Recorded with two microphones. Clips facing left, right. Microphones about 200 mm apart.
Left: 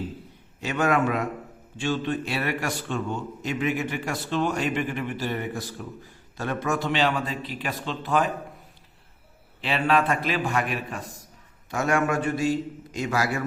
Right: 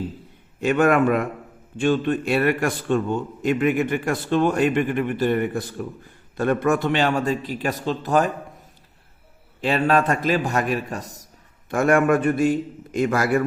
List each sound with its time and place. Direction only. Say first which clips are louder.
0.6 s a man's voice: right 6 dB; 55° right (ahead or behind)
9.6 s a man's voice: right 4 dB; 45° right (ahead or behind)
11.7 s a man's voice: right 6 dB; 55° right (ahead or behind)